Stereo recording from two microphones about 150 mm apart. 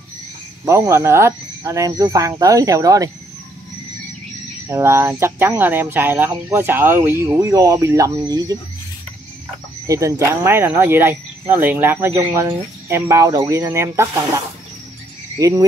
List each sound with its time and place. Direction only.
0.7 s speech: 20° right (ahead or behind)
4.6 s speech: 20° right (ahead or behind)
9.8 s speech: 20° right (ahead or behind)
15.3 s frog: 20° right (ahead or behind)